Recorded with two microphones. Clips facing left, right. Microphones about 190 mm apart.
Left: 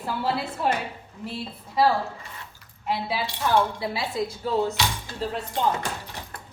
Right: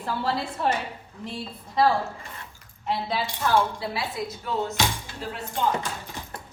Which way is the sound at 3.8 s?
25° left (ahead or behind).